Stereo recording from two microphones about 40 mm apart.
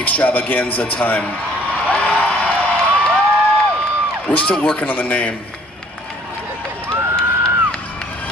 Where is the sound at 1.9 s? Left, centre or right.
Left.